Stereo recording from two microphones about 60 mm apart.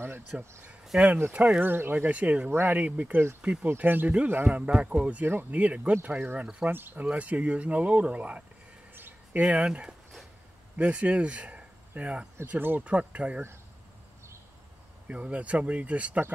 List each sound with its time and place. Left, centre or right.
0.3 s speech: centre
1.3 s speech: right
1.6 s speech: right
2.0 s speech: right
4.6 s speech: centre
5.2 s speech: right
7.1 s speech: right
8.9 s a sound: right
9.4 s speech: centre
12.4 s speech: right
12.8 s speech: right
15.0 s speech: right